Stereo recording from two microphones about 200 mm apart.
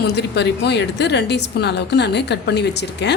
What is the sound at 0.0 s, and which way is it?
A woman's voice, 55° left (ahead or behind).